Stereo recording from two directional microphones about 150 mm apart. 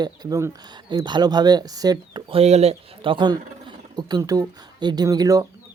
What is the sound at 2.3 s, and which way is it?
A man's voice, 45° right (ahead or behind).